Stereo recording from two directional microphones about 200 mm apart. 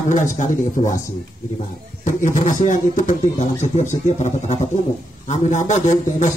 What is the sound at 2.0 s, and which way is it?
Speech, 40° left (ahead or behind).